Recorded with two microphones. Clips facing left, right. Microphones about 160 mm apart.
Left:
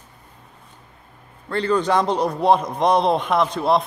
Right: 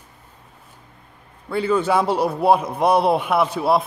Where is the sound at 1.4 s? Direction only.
5° right (ahead or behind).